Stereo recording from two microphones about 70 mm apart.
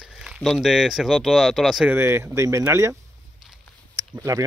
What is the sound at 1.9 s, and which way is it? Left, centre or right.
Speech, right.